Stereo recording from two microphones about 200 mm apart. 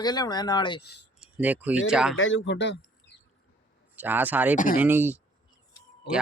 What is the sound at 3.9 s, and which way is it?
Speech, 10° right (ahead or behind).